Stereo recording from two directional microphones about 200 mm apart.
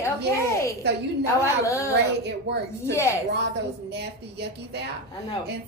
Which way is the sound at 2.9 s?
15° left (ahead or behind).